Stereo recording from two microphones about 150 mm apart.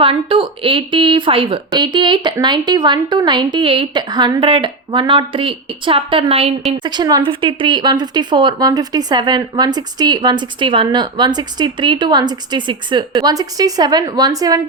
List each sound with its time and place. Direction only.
0.0 s speech: 35° right (ahead or behind)